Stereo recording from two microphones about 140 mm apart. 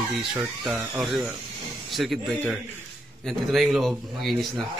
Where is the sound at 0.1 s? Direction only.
Centre (ahead or behind).